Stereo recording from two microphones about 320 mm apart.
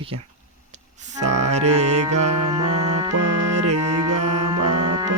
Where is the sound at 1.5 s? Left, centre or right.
Right.